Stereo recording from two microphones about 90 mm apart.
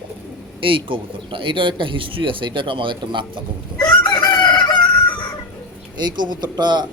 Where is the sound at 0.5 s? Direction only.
75° right (ahead or behind).